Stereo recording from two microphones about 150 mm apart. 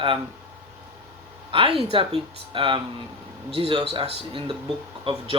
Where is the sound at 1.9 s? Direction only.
35° right (ahead or behind).